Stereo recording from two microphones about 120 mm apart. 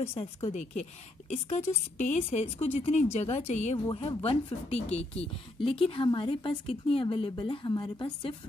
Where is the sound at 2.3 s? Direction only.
60° left (ahead or behind).